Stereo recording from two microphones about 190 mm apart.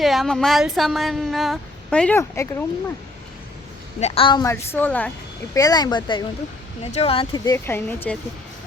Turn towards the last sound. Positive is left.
turn(degrees=10)  # may be behind; listen again after turning